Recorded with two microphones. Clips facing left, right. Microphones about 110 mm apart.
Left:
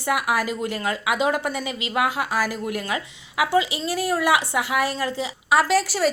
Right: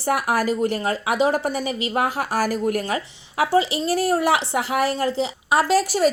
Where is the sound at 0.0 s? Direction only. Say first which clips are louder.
Right 2 dB; 40° right (ahead or behind).